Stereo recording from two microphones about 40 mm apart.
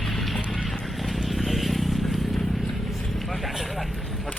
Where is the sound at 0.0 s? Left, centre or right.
Centre.